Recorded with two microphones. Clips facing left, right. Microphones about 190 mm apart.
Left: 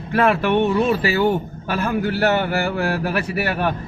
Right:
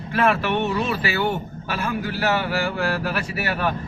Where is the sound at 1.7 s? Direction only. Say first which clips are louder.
Left 5 dB; 60° left (ahead or behind).